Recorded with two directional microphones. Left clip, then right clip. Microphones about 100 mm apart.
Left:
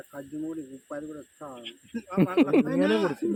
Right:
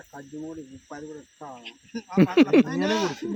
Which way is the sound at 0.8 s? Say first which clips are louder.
Left 1 dB; 15° right (ahead or behind).